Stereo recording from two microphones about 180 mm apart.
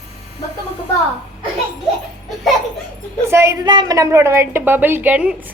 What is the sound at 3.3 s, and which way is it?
A woman's voice, 15° right (ahead or behind).